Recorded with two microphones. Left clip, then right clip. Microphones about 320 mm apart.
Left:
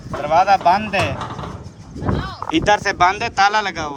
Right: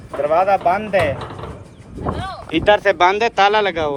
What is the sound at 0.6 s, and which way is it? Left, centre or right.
Speech, centre.